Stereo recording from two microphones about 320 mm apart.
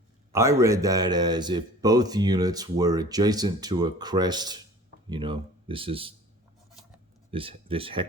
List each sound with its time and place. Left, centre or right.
0.3 s speech: centre
7.3 s speech: centre